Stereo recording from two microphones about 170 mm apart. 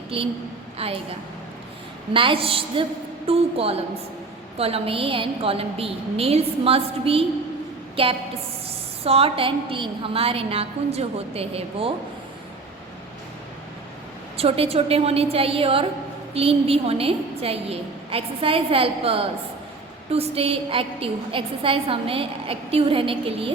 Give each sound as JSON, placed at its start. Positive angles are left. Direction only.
{"t": 0.1, "sound": "a woman's voice", "side_deg": -35}
{"t": 2.1, "sound": "a woman's voice", "side_deg": -30}
{"t": 14.3, "sound": "a woman's voice", "side_deg": -35}